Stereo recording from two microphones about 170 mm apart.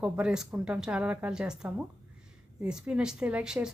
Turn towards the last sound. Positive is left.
turn(degrees=-5)  # may be behind; listen again after turning